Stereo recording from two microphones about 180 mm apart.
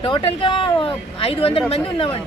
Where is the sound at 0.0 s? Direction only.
30° left (ahead or behind).